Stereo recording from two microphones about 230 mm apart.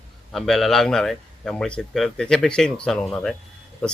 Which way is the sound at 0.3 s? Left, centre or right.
Centre.